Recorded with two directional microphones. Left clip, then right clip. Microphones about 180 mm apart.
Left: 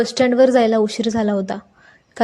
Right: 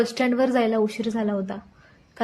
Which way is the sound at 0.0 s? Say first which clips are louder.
Left 8 dB; 25° left (ahead or behind).